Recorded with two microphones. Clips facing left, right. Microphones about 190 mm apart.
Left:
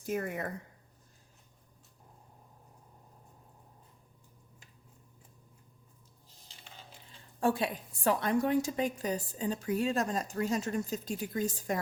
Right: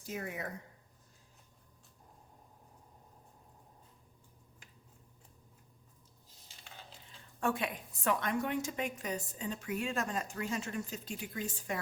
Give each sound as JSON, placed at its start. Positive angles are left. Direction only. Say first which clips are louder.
{"t": 0.0, "sound": "speech", "louder": "left 6 dB", "side_deg": 55}
{"t": 7.3, "sound": "a woman's voice", "louder": "left 5 dB", "side_deg": 35}